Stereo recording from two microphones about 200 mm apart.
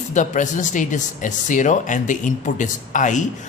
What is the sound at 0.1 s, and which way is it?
Speech, 40° left (ahead or behind).